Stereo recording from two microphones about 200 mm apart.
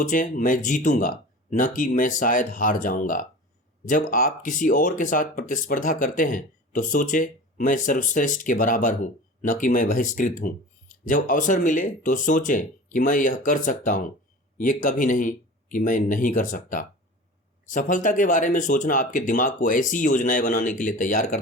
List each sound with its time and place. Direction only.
0.0 s speech: 40° left (ahead or behind)